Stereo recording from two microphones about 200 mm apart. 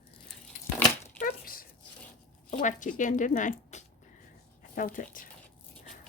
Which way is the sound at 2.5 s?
40° left (ahead or behind).